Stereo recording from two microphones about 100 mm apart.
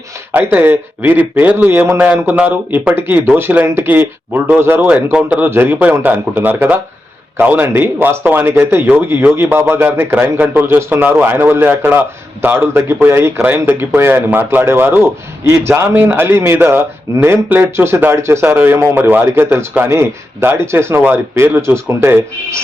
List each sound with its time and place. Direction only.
0.3 s speech: 20° right (ahead or behind)